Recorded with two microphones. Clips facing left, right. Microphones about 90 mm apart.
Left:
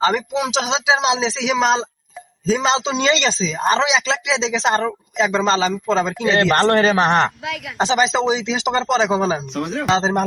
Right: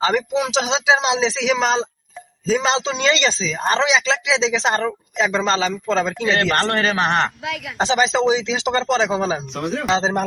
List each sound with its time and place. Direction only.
0.0 s speech: centre (ahead or behind)
3.6 s speech: 5° left (ahead or behind)
6.3 s a man's voice: 20° left (ahead or behind)
6.6 s a man's voice: 35° left (ahead or behind)
6.8 s a man's voice: 20° left (ahead or behind)
7.4 s speech: centre (ahead or behind)
7.9 s speech: 10° left (ahead or behind)
9.3 s speech: centre (ahead or behind)